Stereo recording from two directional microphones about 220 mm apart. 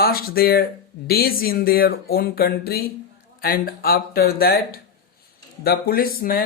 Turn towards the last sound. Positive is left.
turn(degrees=40)  # may be behind; listen again after turning